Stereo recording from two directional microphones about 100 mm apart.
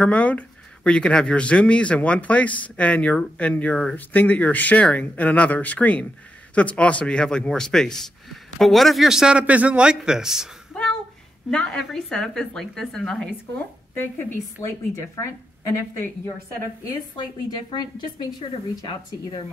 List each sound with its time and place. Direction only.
0.0 s a man's voice: 15° left (ahead or behind)
13.9 s a woman's voice: 25° left (ahead or behind)
17.2 s a woman's voice: 45° left (ahead or behind)